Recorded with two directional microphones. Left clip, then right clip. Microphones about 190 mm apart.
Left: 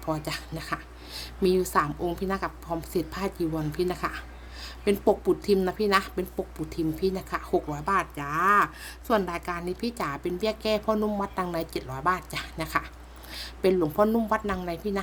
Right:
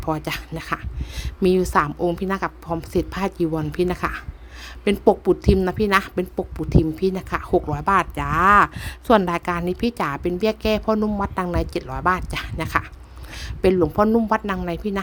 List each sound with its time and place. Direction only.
0.0 s speech: 35° right (ahead or behind)